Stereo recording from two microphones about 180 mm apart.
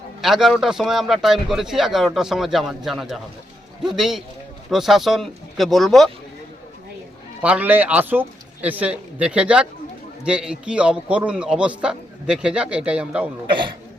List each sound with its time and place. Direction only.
0.2 s a man's voice: centre (ahead or behind)
7.4 s a man's voice: 10° right (ahead or behind)
13.5 s a man's voice: 25° right (ahead or behind)